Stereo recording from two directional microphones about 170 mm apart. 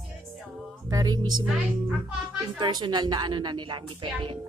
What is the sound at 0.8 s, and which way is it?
Speech, 20° right (ahead or behind).